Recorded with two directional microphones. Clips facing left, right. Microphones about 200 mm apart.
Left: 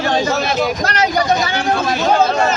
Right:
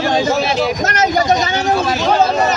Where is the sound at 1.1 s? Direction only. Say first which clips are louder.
Right 2 dB; 20° right (ahead or behind).